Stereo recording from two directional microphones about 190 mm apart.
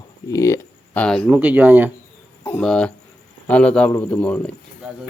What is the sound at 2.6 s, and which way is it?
A man's voice, 5° left (ahead or behind).